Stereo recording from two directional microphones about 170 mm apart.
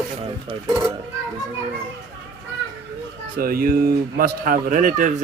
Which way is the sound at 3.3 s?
60° right (ahead or behind).